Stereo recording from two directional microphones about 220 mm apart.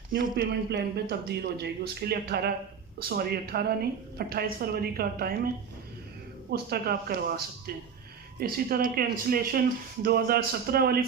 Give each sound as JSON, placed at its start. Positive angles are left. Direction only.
{"t": 0.2, "sound": "speech", "side_deg": -45}
{"t": 6.5, "sound": "speech", "side_deg": -45}